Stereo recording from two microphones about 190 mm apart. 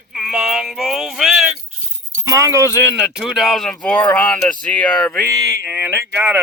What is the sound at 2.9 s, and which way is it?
Speech, centre (ahead or behind).